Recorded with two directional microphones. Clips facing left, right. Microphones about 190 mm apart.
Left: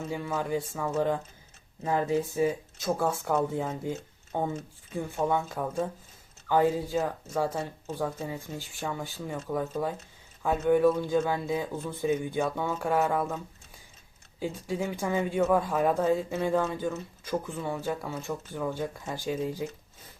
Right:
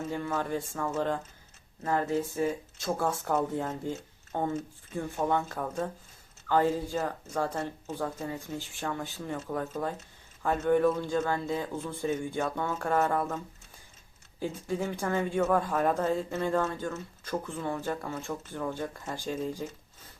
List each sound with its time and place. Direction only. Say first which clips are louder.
0.1 s speech: left 2 dB; 5° left (ahead or behind)
14.7 s speech: left 1 dB; centre (ahead or behind)